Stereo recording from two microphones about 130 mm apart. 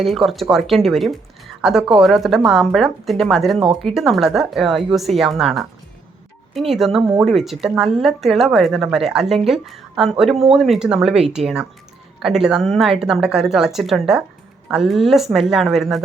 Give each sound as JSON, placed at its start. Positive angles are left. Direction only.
{"t": 0.0, "sound": "speech", "side_deg": 0}